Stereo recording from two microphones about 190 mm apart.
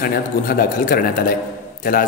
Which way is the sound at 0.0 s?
50° left (ahead or behind).